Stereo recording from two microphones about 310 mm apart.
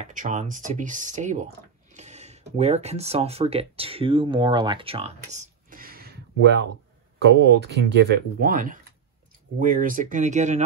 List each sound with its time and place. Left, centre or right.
0.0 s speech: right